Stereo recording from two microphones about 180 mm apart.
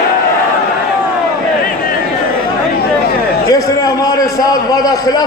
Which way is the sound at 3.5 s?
20° left (ahead or behind).